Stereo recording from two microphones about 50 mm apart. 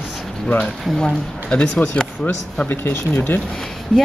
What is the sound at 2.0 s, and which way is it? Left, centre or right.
Speech, left.